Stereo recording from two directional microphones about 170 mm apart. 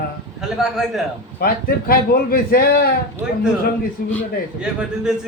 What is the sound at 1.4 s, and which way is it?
A man's voice, 65° left (ahead or behind).